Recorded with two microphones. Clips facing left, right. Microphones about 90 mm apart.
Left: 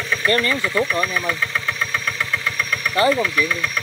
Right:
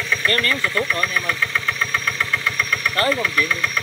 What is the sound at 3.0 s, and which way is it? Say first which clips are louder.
Speech: left 4 dB; 15° left (ahead or behind).